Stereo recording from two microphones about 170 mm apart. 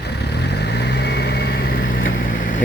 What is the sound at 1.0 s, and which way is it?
Vehicle, 80° left.